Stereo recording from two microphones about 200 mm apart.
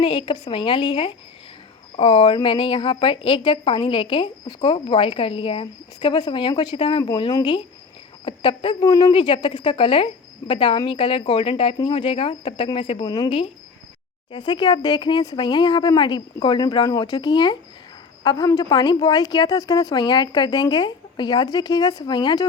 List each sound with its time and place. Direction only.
0.0 s a woman's voice: 25° left (ahead or behind)